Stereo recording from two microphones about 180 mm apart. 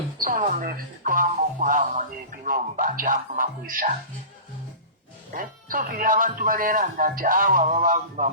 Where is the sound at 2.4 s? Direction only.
50° right (ahead or behind).